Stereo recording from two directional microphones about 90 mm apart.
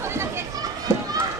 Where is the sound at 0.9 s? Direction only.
30° right (ahead or behind).